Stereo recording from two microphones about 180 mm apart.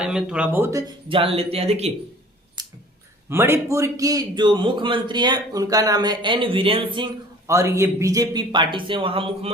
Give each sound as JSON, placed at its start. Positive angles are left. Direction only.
{"t": 0.0, "sound": "speech", "side_deg": -5}
{"t": 1.0, "sound": "speech", "side_deg": -30}
{"t": 2.6, "sound": "a sound", "side_deg": -25}
{"t": 3.2, "sound": "a man's voice", "side_deg": -15}
{"t": 7.4, "sound": "a man's voice", "side_deg": -15}